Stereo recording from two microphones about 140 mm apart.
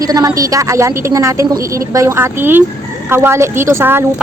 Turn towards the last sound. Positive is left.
turn(degrees=-15)  # may be behind; listen again after turning